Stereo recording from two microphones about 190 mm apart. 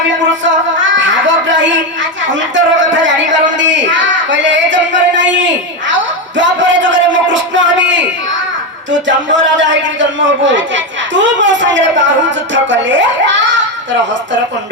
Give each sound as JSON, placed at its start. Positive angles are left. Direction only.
{"t": 0.4, "sound": "music", "side_deg": -75}
{"t": 2.6, "sound": "speech", "side_deg": -75}